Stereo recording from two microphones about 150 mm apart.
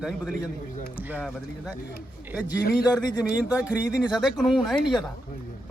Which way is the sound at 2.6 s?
90° left.